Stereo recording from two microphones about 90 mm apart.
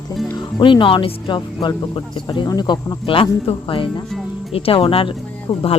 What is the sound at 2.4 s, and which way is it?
Speech, 50° left (ahead or behind).